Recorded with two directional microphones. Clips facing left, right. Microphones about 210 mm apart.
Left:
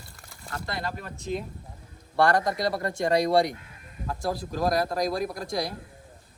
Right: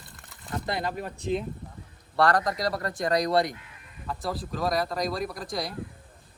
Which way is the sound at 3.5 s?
40° left (ahead or behind).